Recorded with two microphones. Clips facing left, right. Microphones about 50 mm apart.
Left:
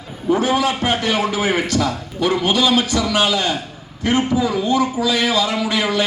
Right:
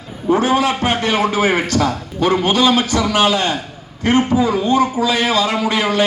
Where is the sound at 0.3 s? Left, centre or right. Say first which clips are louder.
Right 2 dB; right.